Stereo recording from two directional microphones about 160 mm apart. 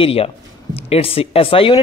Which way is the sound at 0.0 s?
35° left (ahead or behind).